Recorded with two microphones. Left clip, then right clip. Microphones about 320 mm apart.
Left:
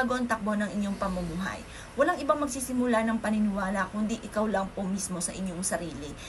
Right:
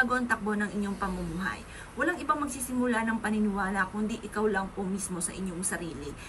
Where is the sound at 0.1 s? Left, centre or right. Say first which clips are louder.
Even; centre.